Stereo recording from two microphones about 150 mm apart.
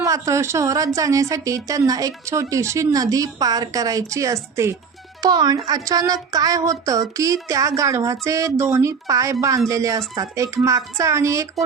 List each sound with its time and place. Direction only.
0.0 s speech: 20° right (ahead or behind)